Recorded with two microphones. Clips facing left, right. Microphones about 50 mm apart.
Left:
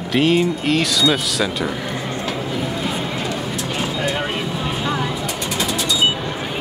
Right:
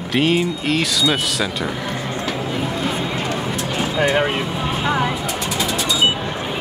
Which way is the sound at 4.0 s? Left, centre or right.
Right.